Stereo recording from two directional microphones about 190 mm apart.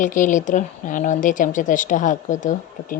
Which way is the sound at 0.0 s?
45° left (ahead or behind).